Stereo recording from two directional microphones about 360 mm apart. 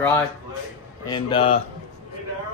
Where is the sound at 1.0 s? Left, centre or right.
Centre.